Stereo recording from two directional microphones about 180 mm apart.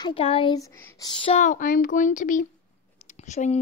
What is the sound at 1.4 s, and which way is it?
A child's voice, 45° left (ahead or behind).